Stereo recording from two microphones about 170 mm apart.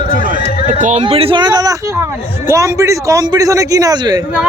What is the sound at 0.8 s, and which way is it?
Speech, 45° right (ahead or behind).